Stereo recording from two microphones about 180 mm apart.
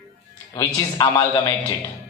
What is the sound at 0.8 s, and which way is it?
Speech, 25° left (ahead or behind).